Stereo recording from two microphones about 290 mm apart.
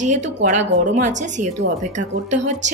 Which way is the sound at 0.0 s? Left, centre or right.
Right.